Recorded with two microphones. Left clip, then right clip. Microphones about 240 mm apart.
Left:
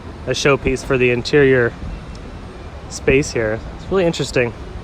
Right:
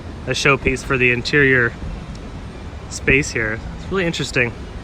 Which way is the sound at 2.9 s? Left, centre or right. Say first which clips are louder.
Left 1 dB; centre.